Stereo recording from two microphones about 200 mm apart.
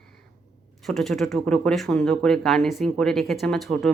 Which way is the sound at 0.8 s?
Centre (ahead or behind).